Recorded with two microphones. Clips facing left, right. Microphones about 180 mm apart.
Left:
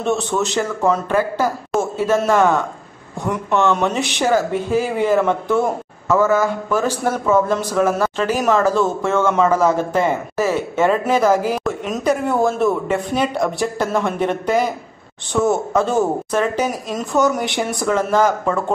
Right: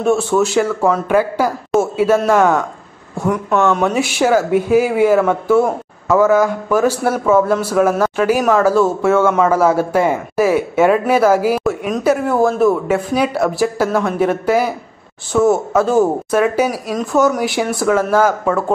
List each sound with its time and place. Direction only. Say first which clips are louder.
0.0 s speech: right 5 dB; 10° right (ahead or behind)